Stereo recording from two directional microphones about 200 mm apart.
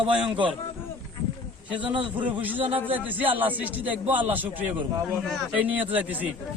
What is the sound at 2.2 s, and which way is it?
A man's voice, 10° right (ahead or behind).